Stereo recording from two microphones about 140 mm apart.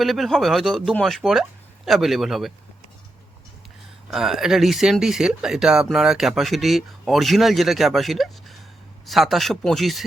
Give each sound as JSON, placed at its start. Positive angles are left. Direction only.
{"t": 0.0, "sound": "speech", "side_deg": 0}
{"t": 4.1, "sound": "speech", "side_deg": 0}